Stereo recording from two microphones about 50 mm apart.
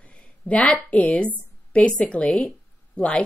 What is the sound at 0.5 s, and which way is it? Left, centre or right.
A woman's voice, left.